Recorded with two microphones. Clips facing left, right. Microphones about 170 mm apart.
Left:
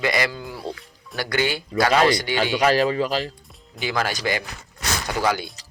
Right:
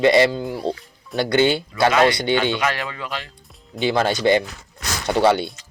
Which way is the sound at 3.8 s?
25° right (ahead or behind).